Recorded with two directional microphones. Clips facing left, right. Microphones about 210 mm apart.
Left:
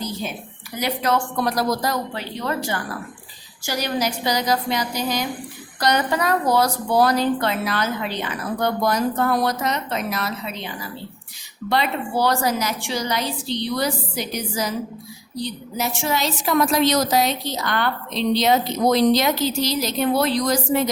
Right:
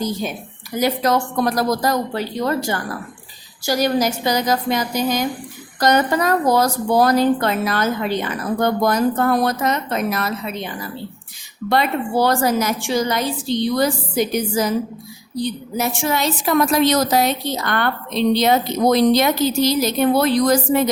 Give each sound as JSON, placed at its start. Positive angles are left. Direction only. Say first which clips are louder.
{"t": 0.8, "sound": "a woman's voice", "louder": "right 4 dB", "side_deg": -40}
{"t": 11.7, "sound": "a woman's voice", "louder": "right 4 dB", "side_deg": -50}